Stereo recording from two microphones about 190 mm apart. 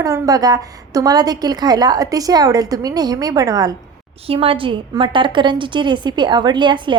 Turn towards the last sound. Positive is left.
turn(degrees=-25)  # may be behind; listen again after turning